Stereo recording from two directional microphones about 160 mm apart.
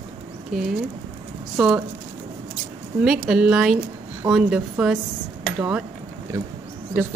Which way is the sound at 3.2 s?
5° right (ahead or behind).